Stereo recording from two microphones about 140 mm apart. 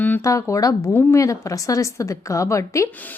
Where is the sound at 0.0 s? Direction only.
10° left (ahead or behind).